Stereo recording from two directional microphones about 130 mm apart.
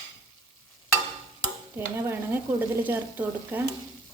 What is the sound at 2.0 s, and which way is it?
A woman's voice, 15° right (ahead or behind).